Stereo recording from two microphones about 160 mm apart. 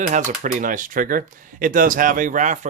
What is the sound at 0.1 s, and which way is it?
Speech, 50° right (ahead or behind).